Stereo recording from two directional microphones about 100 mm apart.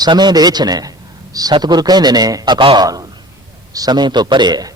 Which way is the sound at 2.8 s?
40° right (ahead or behind).